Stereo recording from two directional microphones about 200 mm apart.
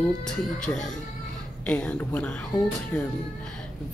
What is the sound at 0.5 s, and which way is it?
Speech, 5° left (ahead or behind).